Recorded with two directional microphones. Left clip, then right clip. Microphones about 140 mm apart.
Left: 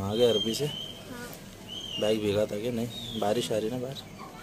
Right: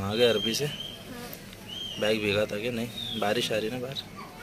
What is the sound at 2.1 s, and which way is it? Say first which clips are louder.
Speech: right 1 dB; 25° left (ahead or behind).